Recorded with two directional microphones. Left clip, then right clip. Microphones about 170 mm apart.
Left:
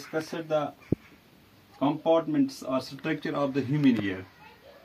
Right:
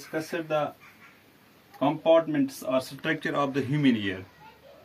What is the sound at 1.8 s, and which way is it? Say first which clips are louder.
Speech: right 3 dB; 15° right (ahead or behind).